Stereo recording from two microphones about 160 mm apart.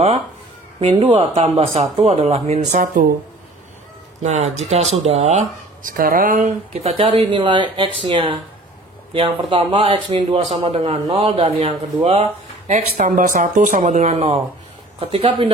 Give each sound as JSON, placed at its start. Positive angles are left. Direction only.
{"t": 0.7, "sound": "a man's voice", "side_deg": -35}
{"t": 2.7, "sound": "speech", "side_deg": -60}
{"t": 4.2, "sound": "speech", "side_deg": -45}
{"t": 5.8, "sound": "speech", "side_deg": -60}
{"t": 6.4, "sound": "a man's voice", "side_deg": -35}
{"t": 12.9, "sound": "a man's voice", "side_deg": -60}